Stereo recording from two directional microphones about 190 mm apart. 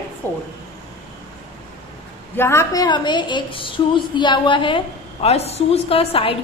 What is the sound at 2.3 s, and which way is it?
A woman's voice, 10° left (ahead or behind).